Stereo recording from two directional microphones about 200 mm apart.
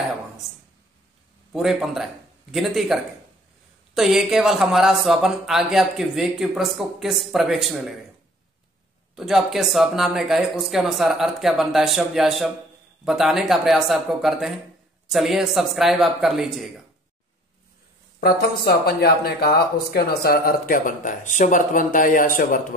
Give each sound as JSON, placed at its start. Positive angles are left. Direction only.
{"t": 1.5, "sound": "speech", "side_deg": 0}
{"t": 9.1, "sound": "speech", "side_deg": 0}
{"t": 18.2, "sound": "speech", "side_deg": 50}